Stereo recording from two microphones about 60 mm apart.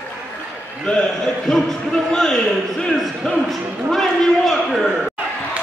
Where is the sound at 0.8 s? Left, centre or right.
Centre.